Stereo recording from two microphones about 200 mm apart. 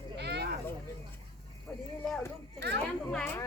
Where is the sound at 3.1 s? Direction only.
10° left (ahead or behind).